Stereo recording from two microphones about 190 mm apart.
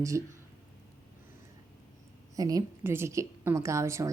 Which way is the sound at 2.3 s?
20° right (ahead or behind).